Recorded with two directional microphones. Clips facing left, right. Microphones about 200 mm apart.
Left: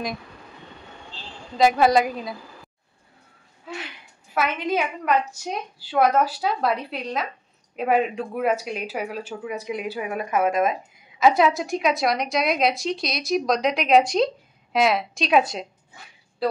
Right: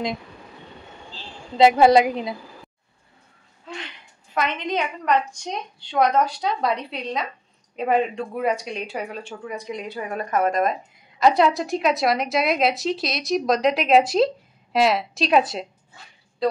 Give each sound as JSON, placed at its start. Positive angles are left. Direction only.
{"t": 1.6, "sound": "a woman's voice", "side_deg": -25}
{"t": 3.6, "sound": "speech", "side_deg": 5}